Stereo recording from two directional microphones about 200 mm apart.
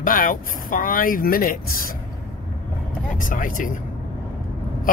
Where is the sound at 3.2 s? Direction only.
40° left (ahead or behind).